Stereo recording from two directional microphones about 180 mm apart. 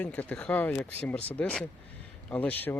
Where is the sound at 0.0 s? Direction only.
10° left (ahead or behind).